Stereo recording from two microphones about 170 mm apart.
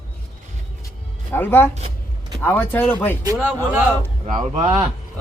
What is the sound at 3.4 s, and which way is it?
Speech, 10° right (ahead or behind).